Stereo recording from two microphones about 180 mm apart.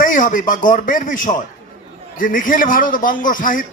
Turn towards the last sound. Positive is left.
turn(degrees=50)  # may be behind; listen again after turning